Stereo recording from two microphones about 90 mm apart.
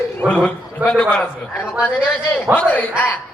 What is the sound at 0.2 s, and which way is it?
Speech, 15° left (ahead or behind).